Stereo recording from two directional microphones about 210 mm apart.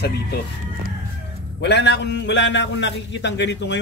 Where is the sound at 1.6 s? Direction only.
55° left (ahead or behind).